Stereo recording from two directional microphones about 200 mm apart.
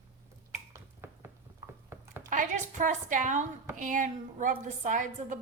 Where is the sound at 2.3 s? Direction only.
40° right (ahead or behind).